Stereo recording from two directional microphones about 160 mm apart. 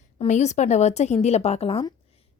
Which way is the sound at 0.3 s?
45° left (ahead or behind).